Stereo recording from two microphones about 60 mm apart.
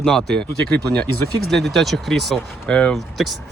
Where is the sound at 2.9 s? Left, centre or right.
Centre.